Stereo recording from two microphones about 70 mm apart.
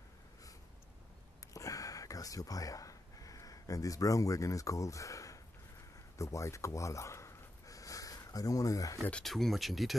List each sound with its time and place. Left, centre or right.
1.5 s a sound: left
6.1 s gasp: left
9.2 s speech: centre